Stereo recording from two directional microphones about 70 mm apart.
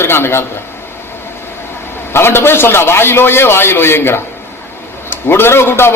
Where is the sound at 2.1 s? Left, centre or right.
Left.